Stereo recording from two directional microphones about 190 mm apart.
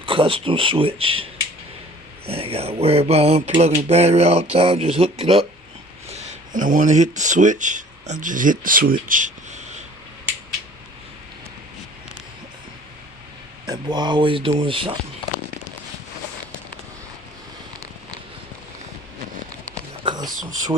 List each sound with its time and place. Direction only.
0.0 s speech: 25° right (ahead or behind)
13.7 s speech: 25° right (ahead or behind)
20.1 s a sound: 20° right (ahead or behind)